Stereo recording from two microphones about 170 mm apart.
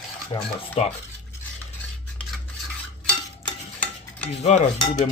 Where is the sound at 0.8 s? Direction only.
40° left (ahead or behind).